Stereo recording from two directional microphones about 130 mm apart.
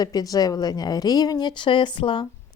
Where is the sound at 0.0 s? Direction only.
30° left (ahead or behind).